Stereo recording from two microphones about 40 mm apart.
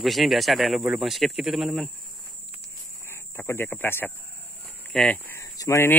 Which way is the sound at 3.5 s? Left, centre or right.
Left.